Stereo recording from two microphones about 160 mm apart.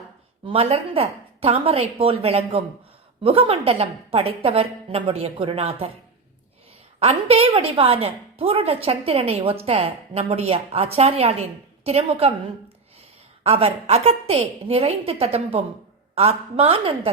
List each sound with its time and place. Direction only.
0.4 s a woman's voice: 35° right (ahead or behind)
7.0 s a woman's voice: 40° right (ahead or behind)
13.4 s a woman's voice: 40° right (ahead or behind)